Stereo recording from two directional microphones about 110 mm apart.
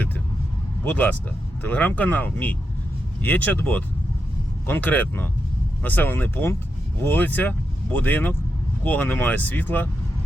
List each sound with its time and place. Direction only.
1.6 s speech: 15° left (ahead or behind)